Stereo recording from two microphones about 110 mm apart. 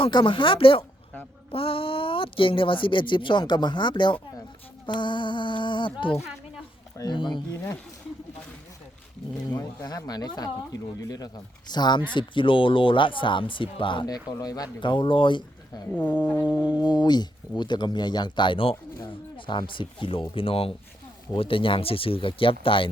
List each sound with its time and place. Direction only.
0.0 s speech: 50° left (ahead or behind)
9.8 s speech: 35° left (ahead or behind)
15.9 s speech: 15° left (ahead or behind)
16.3 s music: 15° right (ahead or behind)
16.9 s speech: 40° left (ahead or behind)